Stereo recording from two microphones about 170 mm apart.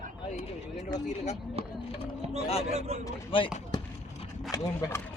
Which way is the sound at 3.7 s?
25° left (ahead or behind).